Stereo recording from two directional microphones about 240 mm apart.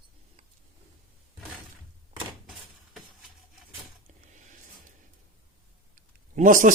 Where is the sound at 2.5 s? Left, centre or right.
Centre.